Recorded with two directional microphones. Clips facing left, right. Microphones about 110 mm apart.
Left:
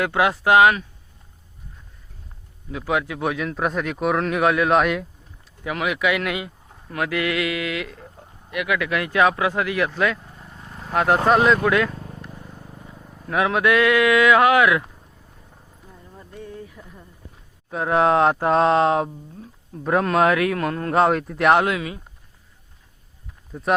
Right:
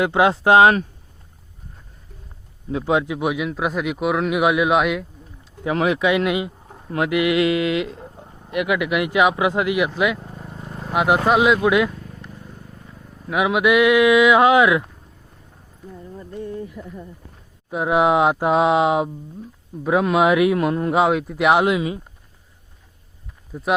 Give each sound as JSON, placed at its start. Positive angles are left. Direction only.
{"t": 0.0, "sound": "speech", "side_deg": -20}
{"t": 2.7, "sound": "speech", "side_deg": -25}
{"t": 5.6, "sound": "speech", "side_deg": -30}
{"t": 10.2, "sound": "vehicle", "side_deg": -25}
{"t": 11.3, "sound": "speech", "side_deg": -10}
{"t": 13.2, "sound": "speech", "side_deg": -10}
{"t": 17.7, "sound": "speech", "side_deg": -15}
{"t": 20.9, "sound": "speech", "side_deg": -5}
{"t": 23.5, "sound": "speech", "side_deg": -5}